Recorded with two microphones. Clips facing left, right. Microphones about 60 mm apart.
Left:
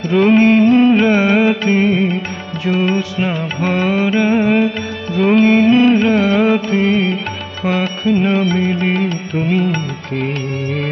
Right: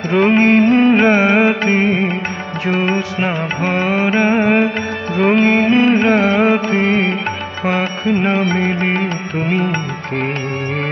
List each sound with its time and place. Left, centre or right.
0.4 s music: right